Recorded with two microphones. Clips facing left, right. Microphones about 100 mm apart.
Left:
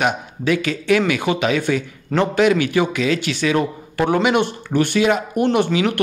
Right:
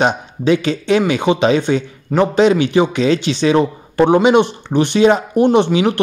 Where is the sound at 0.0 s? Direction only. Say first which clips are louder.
Right 4 dB; 25° right (ahead or behind).